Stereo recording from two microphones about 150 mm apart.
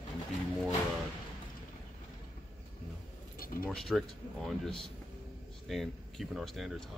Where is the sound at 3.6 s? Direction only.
Centre (ahead or behind).